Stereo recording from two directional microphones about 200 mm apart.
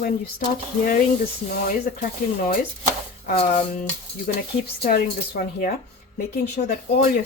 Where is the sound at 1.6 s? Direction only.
45° left (ahead or behind).